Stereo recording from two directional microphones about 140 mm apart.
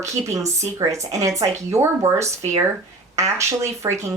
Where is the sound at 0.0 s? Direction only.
20° right (ahead or behind).